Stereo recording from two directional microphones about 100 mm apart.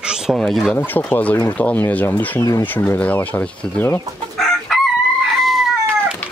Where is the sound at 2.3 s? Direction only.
35° left (ahead or behind).